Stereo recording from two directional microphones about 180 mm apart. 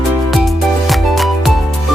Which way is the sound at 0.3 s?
Centre (ahead or behind).